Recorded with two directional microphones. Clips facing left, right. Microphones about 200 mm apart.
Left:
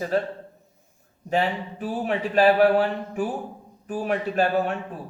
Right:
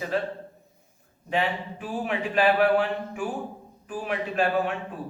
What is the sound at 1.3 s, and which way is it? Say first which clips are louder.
A man's voice: left 3 dB; 40° left (ahead or behind).